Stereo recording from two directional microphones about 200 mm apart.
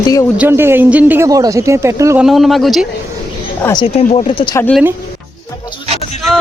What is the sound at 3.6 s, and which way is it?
Speech, 20° left (ahead or behind).